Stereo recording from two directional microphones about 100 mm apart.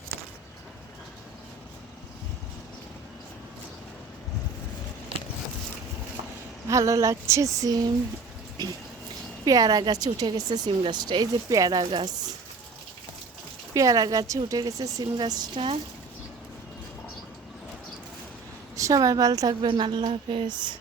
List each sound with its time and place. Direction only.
6.7 s a woman's voice: 30° right (ahead or behind)
9.4 s a woman's voice: 40° right (ahead or behind)
13.7 s a woman's voice: 35° right (ahead or behind)
18.8 s a woman's voice: 35° right (ahead or behind)
19.6 s speech: 55° right (ahead or behind)